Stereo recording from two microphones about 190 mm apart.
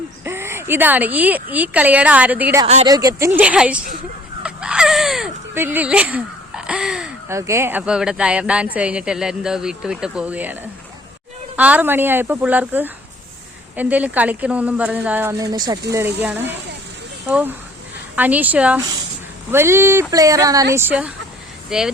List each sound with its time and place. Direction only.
0.3 s speech: 15° right (ahead or behind)
4.4 s a sound: 5° right (ahead or behind)
5.5 s speech: 10° right (ahead or behind)
7.3 s a woman's voice: 15° right (ahead or behind)
15.5 s a woman's voice: 20° right (ahead or behind); by 21.9 s 5° right (ahead or behind)